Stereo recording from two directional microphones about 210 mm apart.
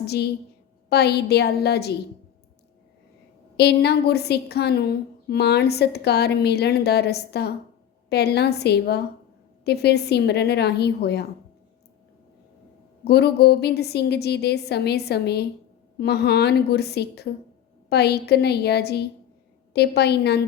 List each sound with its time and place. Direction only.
0.0 s a woman's voice: 50° left (ahead or behind)
3.6 s a woman's voice: 50° left (ahead or behind)
13.1 s a woman's voice: 50° left (ahead or behind)